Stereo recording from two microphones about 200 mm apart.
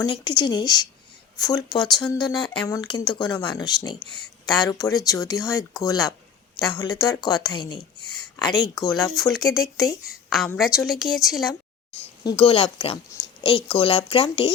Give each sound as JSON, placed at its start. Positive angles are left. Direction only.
{"t": 0.0, "sound": "a woman's voice", "side_deg": 20}
{"t": 2.0, "sound": "a woman's voice", "side_deg": 5}
{"t": 2.2, "sound": "a woman's voice", "side_deg": 20}
{"t": 10.2, "sound": "a woman's voice", "side_deg": 0}
{"t": 12.2, "sound": "a woman's voice", "side_deg": 25}